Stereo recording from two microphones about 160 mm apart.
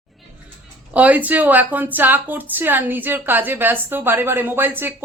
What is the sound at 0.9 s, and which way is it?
A woman's voice, 10° right (ahead or behind).